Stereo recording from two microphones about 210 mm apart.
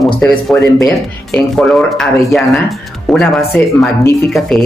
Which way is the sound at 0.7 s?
15° left (ahead or behind).